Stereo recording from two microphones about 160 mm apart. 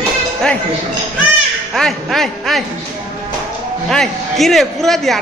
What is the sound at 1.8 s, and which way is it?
Speech, centre (ahead or behind).